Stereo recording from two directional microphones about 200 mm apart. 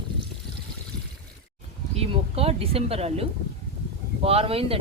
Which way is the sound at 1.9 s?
30° right (ahead or behind).